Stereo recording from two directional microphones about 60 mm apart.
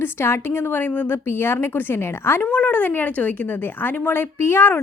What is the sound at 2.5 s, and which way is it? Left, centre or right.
A woman's voice, left.